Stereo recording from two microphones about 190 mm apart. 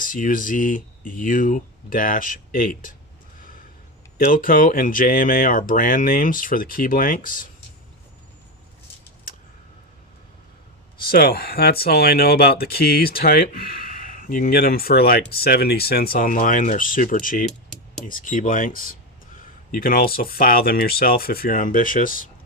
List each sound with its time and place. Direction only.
0.0 s speech: 45° left (ahead or behind)
4.3 s speech: 50° left (ahead or behind)
11.1 s speech: 55° left (ahead or behind)